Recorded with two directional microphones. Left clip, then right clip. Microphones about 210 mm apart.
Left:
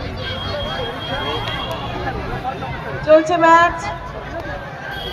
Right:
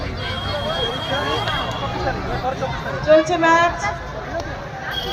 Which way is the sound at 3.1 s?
30° left (ahead or behind).